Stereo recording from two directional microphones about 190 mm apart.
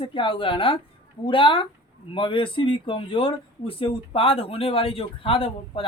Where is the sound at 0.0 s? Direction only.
25° left (ahead or behind).